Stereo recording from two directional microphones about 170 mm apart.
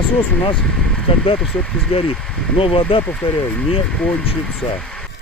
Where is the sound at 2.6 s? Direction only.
30° left (ahead or behind).